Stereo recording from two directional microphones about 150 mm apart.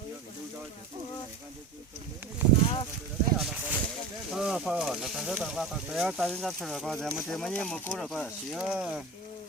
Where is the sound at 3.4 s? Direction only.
10° right (ahead or behind).